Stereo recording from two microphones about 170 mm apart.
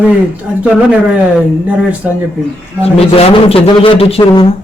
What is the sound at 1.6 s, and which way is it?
Speech, 10° right (ahead or behind).